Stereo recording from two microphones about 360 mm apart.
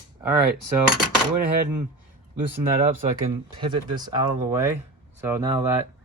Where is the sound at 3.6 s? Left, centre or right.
Centre.